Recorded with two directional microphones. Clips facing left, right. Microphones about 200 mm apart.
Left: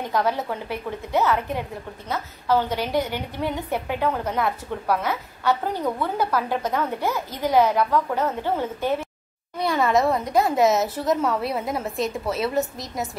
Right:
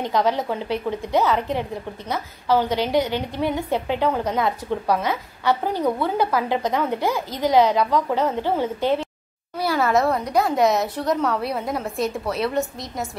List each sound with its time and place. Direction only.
0.1 s a woman's voice: 15° right (ahead or behind)
9.6 s speech: centre (ahead or behind)